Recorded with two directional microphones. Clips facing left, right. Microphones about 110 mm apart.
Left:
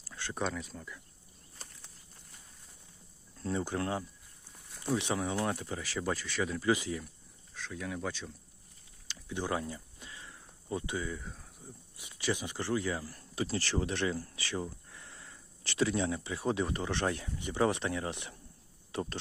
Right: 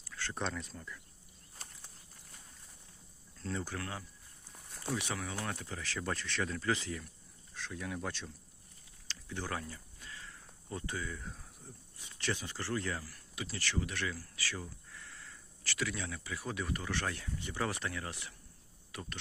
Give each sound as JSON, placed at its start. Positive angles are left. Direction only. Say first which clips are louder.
{"t": 0.1, "sound": "a sound", "louder": "left 1 dB", "side_deg": 15}
{"t": 0.3, "sound": "speech", "louder": "left 4 dB", "side_deg": 5}
{"t": 3.4, "sound": "speech", "louder": "left 6 dB", "side_deg": 20}
{"t": 7.5, "sound": "speech", "louder": "left 2 dB", "side_deg": 0}
{"t": 9.0, "sound": "a sound", "louder": "left 5 dB", "side_deg": 15}
{"t": 10.7, "sound": "speech", "louder": "left 5 dB", "side_deg": 15}
{"t": 11.2, "sound": "speech", "louder": "left 1 dB", "side_deg": 0}
{"t": 11.9, "sound": "speech", "louder": "left 4 dB", "side_deg": 15}
{"t": 13.1, "sound": "speech", "louder": "left 9 dB", "side_deg": 35}